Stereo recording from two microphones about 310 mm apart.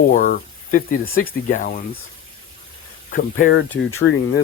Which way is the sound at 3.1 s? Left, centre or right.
Left.